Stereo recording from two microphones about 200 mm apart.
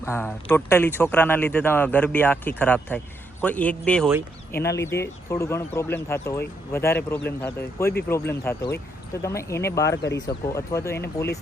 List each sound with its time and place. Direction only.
0.0 s speech: 10° left (ahead or behind)
4.5 s speech: 55° left (ahead or behind)
4.8 s speech: 15° left (ahead or behind)